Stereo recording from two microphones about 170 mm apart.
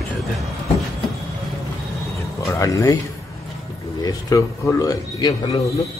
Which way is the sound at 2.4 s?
15° left (ahead or behind).